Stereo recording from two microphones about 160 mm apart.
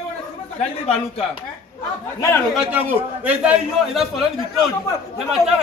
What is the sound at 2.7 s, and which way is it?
A man's voice, 10° right (ahead or behind).